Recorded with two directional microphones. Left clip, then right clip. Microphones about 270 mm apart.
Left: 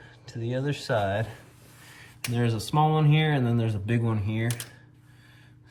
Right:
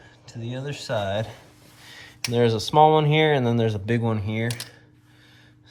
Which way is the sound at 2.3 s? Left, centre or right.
Centre.